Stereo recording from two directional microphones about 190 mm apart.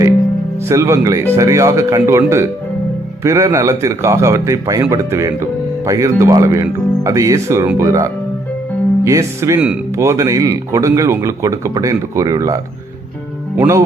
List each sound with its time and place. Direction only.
0.6 s speech: 15° right (ahead or behind)